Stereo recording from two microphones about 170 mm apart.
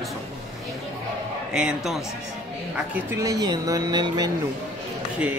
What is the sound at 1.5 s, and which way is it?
Speech, 5° right (ahead or behind).